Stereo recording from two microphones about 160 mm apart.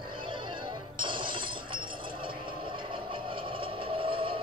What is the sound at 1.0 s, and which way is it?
Chink, 30° right (ahead or behind).